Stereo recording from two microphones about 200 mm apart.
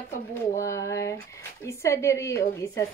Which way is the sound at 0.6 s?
15° left (ahead or behind).